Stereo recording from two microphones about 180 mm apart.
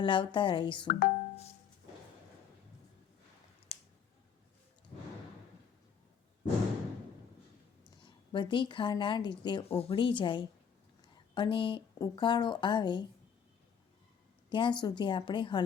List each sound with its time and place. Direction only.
0.0 s a woman's voice: 30° left (ahead or behind)
0.9 s speech: 50° left (ahead or behind)
3.7 s a sound: 35° left (ahead or behind)
8.0 s a woman's voice: 25° left (ahead or behind)
14.5 s a woman's voice: 25° left (ahead or behind)